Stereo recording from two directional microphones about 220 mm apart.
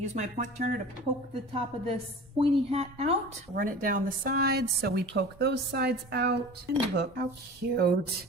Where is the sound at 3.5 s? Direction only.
40° right (ahead or behind).